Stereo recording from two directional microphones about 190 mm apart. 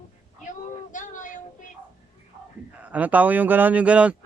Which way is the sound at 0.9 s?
40° left (ahead or behind).